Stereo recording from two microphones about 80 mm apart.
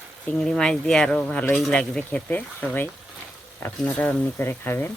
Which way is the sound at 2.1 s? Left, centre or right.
Left.